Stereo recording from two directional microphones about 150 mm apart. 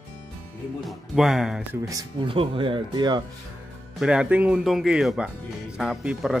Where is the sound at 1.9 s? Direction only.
30° right (ahead or behind).